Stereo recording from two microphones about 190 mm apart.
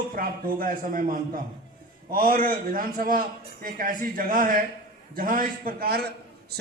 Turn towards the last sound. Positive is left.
turn(degrees=-55)  # may be behind; listen again after turning